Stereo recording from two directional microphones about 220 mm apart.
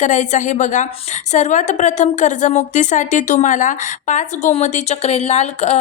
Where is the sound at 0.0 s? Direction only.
35° left (ahead or behind).